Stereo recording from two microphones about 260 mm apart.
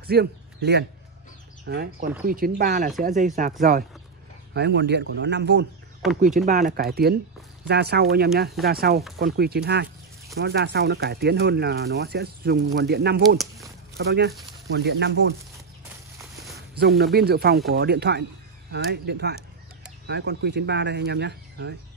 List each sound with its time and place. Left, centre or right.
0.0 s a man's voice: right
4.6 s speech: right
6.2 s speech: right
16.7 s speech: right